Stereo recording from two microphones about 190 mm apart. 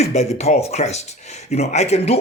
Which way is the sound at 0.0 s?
35° left (ahead or behind).